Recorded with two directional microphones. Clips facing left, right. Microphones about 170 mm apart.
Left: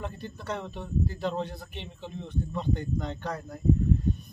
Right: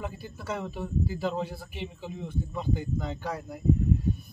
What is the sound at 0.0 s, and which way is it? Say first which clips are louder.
A man's voice: even; 5° right (ahead or behind).